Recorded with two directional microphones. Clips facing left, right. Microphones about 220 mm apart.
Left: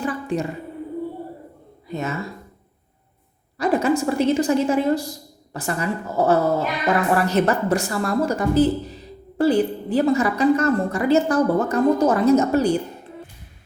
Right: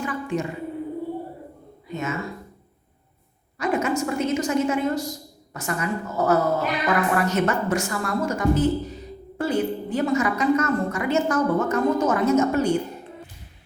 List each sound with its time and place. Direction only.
0.0 s a sound: 35° left (ahead or behind)
1.9 s speech: 35° left (ahead or behind)
3.6 s a woman's voice: 35° left (ahead or behind)